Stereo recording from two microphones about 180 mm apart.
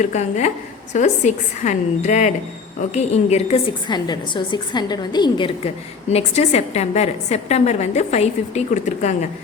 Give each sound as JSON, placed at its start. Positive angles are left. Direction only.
{"t": 0.0, "sound": "a woman's voice", "side_deg": 40}
{"t": 3.8, "sound": "a woman's voice", "side_deg": 25}